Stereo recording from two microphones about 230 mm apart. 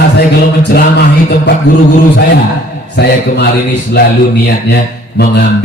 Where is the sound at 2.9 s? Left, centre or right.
Left.